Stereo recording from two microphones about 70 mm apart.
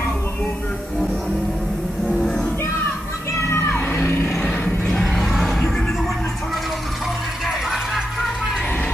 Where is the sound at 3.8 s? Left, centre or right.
Left.